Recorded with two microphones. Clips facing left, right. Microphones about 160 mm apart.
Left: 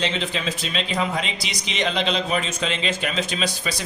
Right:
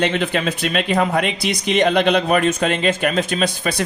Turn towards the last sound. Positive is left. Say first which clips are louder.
# right 6 dB
turn(degrees=-55)  # may be behind; listen again after turning